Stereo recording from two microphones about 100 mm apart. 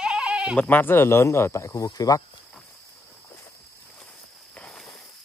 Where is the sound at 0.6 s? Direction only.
20° left (ahead or behind); by 2.2 s 40° left (ahead or behind).